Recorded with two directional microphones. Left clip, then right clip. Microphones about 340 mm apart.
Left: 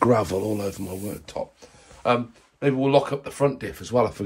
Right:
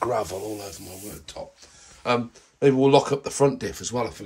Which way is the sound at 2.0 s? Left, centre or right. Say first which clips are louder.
Left 2 dB; centre.